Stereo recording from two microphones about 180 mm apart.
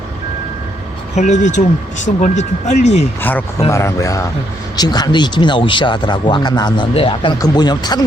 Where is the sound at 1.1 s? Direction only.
40° left (ahead or behind).